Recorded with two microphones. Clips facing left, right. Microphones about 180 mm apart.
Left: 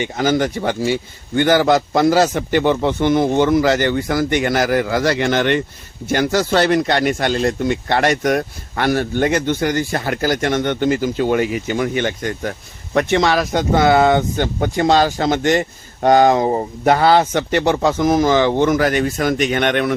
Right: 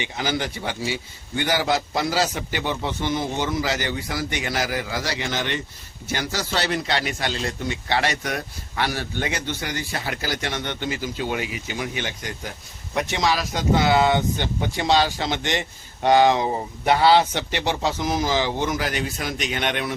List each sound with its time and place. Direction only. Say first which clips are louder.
0.0 s a man's voice: left 9 dB; 45° left (ahead or behind)